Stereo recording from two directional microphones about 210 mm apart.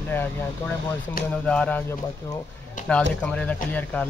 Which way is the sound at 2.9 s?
5° left (ahead or behind).